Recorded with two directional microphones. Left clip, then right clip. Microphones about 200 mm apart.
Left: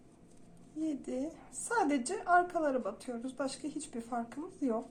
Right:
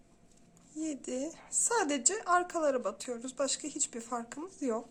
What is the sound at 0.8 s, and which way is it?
A woman's voice, 35° right (ahead or behind).